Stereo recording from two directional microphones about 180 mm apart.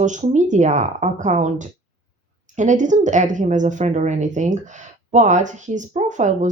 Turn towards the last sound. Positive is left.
turn(degrees=-45)  # may be behind; listen again after turning